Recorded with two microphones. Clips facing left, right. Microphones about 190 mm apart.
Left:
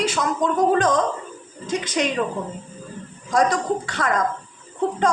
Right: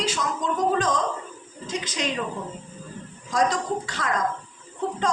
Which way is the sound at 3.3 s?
60° left (ahead or behind).